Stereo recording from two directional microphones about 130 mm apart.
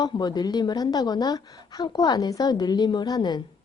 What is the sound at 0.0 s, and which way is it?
A woman's voice, 35° left (ahead or behind).